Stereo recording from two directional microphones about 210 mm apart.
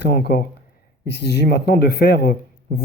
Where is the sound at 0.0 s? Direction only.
50° left (ahead or behind).